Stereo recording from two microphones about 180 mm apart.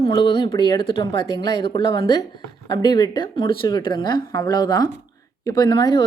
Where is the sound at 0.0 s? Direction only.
25° left (ahead or behind).